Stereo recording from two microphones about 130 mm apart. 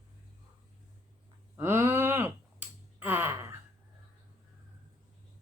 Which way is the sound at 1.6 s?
20° right (ahead or behind).